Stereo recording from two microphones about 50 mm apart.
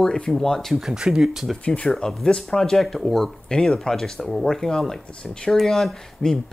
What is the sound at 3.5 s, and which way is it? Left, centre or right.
Speech, centre.